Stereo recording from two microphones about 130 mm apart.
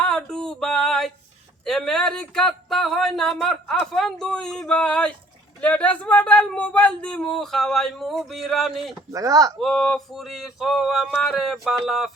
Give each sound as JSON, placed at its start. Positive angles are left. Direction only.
{"t": 0.0, "sound": "a sound", "side_deg": 5}
{"t": 1.6, "sound": "speech", "side_deg": 5}
{"t": 9.1, "sound": "speech", "side_deg": -25}
{"t": 9.6, "sound": "speech", "side_deg": 0}